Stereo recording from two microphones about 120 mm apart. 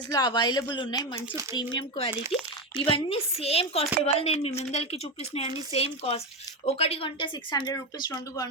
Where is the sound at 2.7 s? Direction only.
50° left (ahead or behind).